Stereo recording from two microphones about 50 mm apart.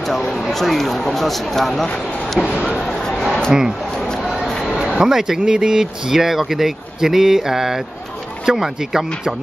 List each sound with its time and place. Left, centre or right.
0.4 s speech: centre
2.8 s a sound: centre
4.9 s speech: centre